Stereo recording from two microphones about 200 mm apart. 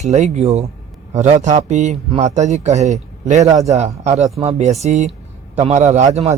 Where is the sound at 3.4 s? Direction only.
15° right (ahead or behind).